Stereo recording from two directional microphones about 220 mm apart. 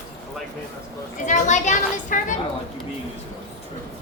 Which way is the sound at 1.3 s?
35° left (ahead or behind).